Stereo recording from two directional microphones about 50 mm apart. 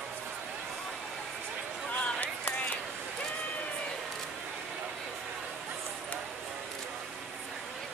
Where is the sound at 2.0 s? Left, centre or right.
Left.